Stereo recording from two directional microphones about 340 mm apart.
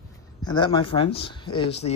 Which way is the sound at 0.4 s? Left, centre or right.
Centre.